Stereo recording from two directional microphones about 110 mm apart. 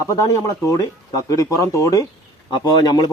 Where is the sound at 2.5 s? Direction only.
40° left (ahead or behind).